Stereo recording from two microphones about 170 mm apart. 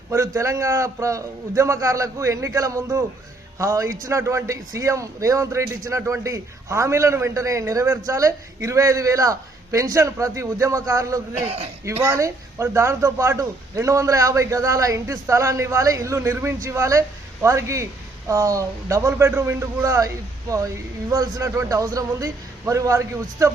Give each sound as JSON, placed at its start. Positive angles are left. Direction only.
{"t": 0.1, "sound": "a man's voice", "side_deg": -15}
{"t": 11.3, "sound": "a man's voice", "side_deg": -35}
{"t": 11.9, "sound": "a man's voice", "side_deg": -15}
{"t": 21.1, "sound": "a man's voice", "side_deg": -20}